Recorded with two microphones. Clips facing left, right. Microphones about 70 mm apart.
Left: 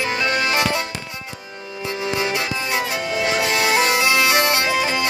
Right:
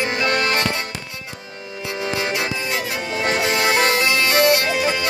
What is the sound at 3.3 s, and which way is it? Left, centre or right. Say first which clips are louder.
Music: right 1 dB; right.